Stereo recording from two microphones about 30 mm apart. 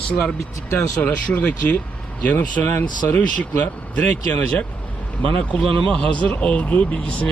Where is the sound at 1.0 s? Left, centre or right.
Left.